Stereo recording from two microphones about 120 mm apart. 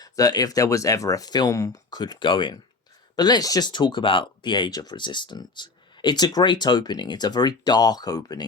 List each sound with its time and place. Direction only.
0.0 s speech: 30° left (ahead or behind)